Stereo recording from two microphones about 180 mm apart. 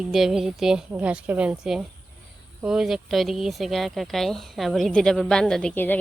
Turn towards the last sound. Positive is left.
turn(degrees=10)  # may be behind; listen again after turning